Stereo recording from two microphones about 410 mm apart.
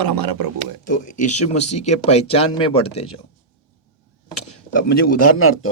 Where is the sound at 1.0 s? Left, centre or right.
Centre.